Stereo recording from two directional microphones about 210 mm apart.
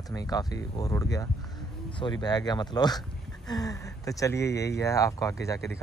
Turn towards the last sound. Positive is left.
turn(degrees=15)  # may be behind; listen again after turning